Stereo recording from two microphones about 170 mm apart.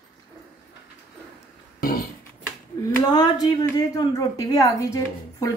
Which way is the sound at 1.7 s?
60° left (ahead or behind).